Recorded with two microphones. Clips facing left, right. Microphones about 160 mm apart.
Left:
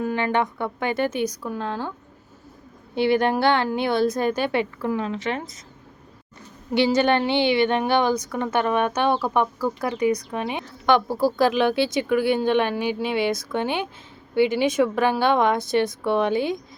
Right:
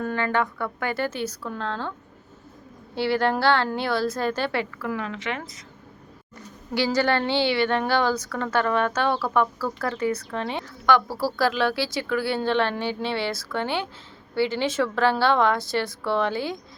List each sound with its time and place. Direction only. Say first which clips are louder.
0.0 s a woman's voice: left 2 dB; 15° left (ahead or behind)
2.9 s a woman's voice: left 3 dB; 20° left (ahead or behind); by 5.4 s 35° left (ahead or behind)
6.7 s a woman's voice: left 3 dB; 20° left (ahead or behind)